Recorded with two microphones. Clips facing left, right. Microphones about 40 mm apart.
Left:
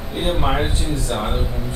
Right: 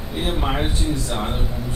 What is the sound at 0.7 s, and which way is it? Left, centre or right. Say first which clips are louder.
Speech: even; left.